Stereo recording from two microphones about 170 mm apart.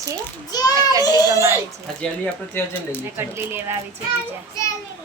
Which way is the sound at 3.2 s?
15° right (ahead or behind).